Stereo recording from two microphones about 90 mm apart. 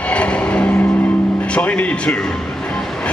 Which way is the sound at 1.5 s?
15° left (ahead or behind).